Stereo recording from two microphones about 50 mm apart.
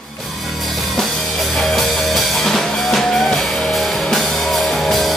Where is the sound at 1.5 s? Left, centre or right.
Centre.